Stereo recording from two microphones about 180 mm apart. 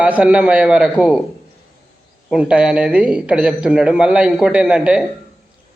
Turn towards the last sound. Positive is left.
turn(degrees=-5)  # may be behind; listen again after turning